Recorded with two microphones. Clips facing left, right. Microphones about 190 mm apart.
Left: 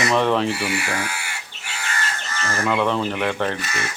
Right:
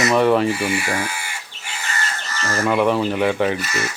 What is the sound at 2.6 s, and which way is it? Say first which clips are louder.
Speech: right 3 dB; 15° right (ahead or behind).